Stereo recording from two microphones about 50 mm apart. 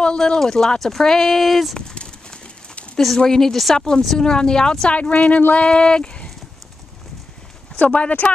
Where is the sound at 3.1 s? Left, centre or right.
Centre.